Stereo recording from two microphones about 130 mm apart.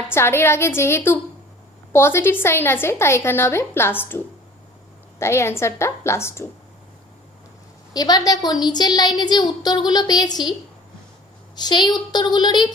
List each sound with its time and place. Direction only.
0.1 s a woman's voice: 20° left (ahead or behind)
5.2 s a woman's voice: 20° left (ahead or behind)
7.9 s a woman's voice: 30° left (ahead or behind)
11.5 s a woman's voice: 35° left (ahead or behind)